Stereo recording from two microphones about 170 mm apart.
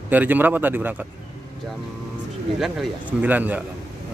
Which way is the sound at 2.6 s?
5° right (ahead or behind).